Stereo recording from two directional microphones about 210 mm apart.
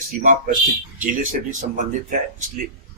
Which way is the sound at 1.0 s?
40° right (ahead or behind).